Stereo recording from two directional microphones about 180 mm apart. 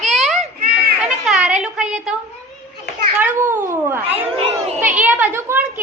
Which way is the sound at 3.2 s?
10° right (ahead or behind).